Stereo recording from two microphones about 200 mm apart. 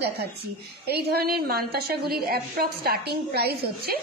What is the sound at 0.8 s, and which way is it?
A woman's voice, 55° right (ahead or behind).